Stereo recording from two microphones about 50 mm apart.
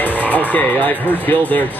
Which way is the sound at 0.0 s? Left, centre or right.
Left.